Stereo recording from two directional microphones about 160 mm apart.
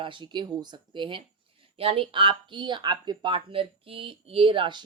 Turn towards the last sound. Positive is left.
turn(degrees=-30)  # may be behind; listen again after turning